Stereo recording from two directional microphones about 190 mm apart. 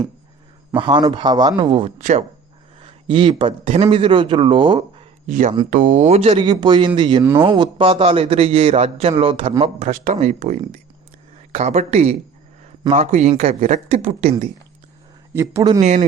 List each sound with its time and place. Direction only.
0.8 s a man's voice: 25° right (ahead or behind)
2.0 s a man's voice: 40° right (ahead or behind)
2.8 s a man's voice: 25° right (ahead or behind)
5.2 s a man's voice: 45° right (ahead or behind)
15.3 s speech: 15° right (ahead or behind)
15.8 s a man's voice: 40° right (ahead or behind)